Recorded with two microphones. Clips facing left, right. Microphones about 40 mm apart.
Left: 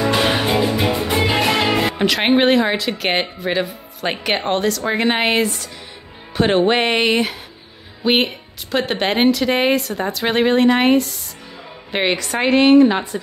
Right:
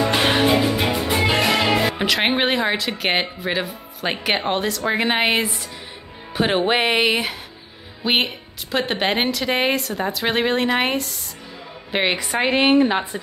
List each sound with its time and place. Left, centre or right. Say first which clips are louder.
0.2 s music: even; centre
0.9 s music: left 2 dB; left
1.2 s music: left 1 dB; centre
2.0 s a woman's voice: left 4 dB; centre